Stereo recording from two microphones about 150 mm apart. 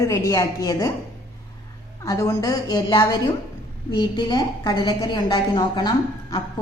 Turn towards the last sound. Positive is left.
turn(degrees=30)  # may be behind; listen again after turning